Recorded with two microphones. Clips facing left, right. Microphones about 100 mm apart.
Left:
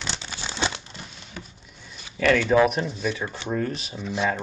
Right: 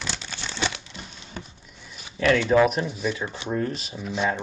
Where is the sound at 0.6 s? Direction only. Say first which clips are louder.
Left 1 dB; 30° left (ahead or behind).